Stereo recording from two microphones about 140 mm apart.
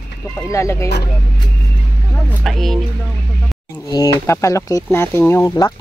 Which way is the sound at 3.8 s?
25° left (ahead or behind).